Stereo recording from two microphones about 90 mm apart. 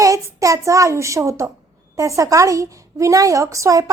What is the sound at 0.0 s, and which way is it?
A child's voice, 35° right (ahead or behind).